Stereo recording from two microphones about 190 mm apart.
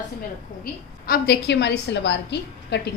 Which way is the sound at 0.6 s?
50° left (ahead or behind).